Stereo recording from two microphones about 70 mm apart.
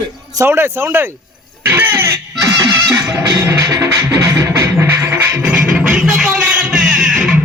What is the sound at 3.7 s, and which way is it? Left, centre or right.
Music, right.